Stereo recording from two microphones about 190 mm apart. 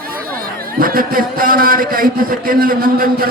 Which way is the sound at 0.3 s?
50° right (ahead or behind).